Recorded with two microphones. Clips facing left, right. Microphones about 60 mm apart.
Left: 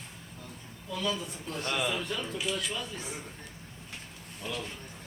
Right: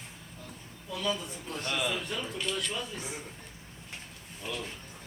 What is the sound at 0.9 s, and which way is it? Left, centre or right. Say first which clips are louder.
Speech: even; centre.